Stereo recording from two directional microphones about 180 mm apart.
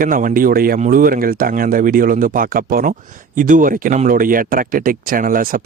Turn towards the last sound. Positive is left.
turn(degrees=-50)  # may be behind; listen again after turning